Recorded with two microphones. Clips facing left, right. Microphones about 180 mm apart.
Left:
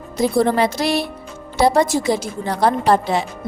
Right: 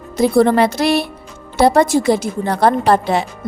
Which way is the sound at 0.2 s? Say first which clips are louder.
Right 4 dB; 60° right (ahead or behind).